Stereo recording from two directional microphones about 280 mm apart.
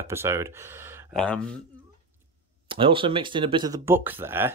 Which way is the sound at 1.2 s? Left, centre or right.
Centre.